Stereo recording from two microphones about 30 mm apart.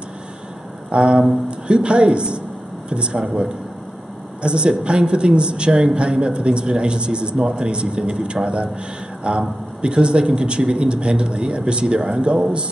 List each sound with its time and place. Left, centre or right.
0.9 s a man's voice: right
4.4 s a man's voice: right